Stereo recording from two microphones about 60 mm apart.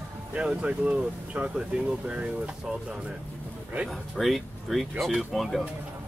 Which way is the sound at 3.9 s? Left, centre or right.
Centre.